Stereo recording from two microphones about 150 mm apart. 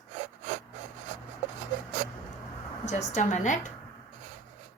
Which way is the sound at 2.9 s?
50° left (ahead or behind).